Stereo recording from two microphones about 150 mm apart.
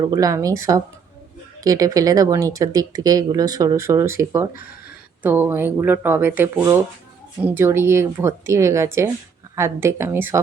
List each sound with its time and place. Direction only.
0.0 s speech: 20° right (ahead or behind)